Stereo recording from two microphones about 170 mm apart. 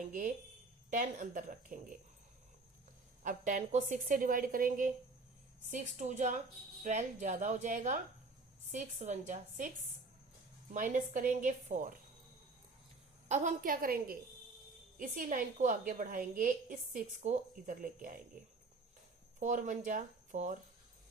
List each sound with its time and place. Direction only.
0.0 s a woman's voice: 50° right (ahead or behind)
3.2 s a woman's voice: 50° right (ahead or behind)
13.2 s a woman's voice: 45° right (ahead or behind)
19.4 s a woman's voice: 45° right (ahead or behind)